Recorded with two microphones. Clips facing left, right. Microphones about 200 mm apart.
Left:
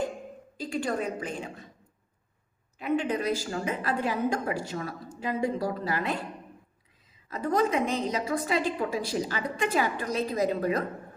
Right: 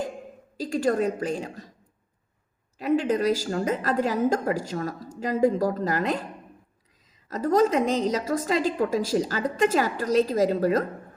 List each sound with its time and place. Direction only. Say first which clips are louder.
0.5 s a woman's voice: right 6 dB; 40° right (ahead or behind)
2.7 s a woman's voice: right 5 dB; 40° right (ahead or behind)
7.3 s a woman's voice: right 5 dB; 40° right (ahead or behind)